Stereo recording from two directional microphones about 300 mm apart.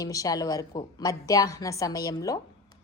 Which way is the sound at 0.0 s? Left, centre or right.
Centre.